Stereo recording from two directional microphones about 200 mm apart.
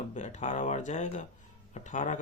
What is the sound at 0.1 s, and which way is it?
Speech, 35° left (ahead or behind).